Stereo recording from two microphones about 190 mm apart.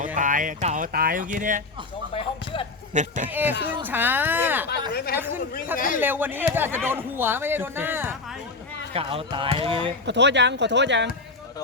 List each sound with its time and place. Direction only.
0.0 s speech: 40° right (ahead or behind)
2.1 s speech: 25° left (ahead or behind)
2.9 s speech: 40° right (ahead or behind)
3.2 s speech: 10° right (ahead or behind)
4.7 s speech: 55° left (ahead or behind)
5.1 s speech: 10° right (ahead or behind)
5.7 s speech: 45° left (ahead or behind)
6.0 s speech: 10° right (ahead or behind)
8.9 s speech: 30° right (ahead or behind)
10.1 s speech: 65° right (ahead or behind)